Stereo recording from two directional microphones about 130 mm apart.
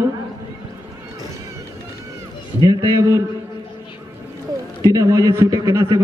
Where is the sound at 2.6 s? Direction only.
25° right (ahead or behind).